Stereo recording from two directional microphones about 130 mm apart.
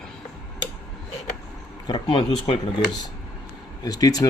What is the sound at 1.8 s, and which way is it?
Speech, 35° left (ahead or behind).